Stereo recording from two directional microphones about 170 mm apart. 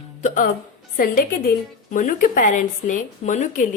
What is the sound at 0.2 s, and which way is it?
Speech, 45° left (ahead or behind).